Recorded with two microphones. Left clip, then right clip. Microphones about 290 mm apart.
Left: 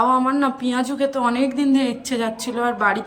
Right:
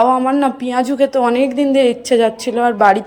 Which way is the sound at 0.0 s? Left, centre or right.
Centre.